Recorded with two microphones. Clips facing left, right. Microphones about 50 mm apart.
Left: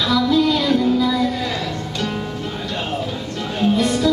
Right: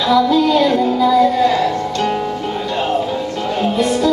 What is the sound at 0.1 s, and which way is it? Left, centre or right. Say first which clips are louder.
Music: right 5 dB; centre.